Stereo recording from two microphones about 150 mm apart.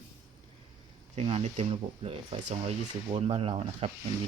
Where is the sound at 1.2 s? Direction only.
40° right (ahead or behind).